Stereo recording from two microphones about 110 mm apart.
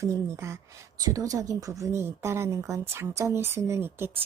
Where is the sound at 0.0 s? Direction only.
25° right (ahead or behind).